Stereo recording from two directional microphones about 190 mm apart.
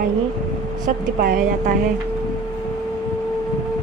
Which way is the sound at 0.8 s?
50° right (ahead or behind).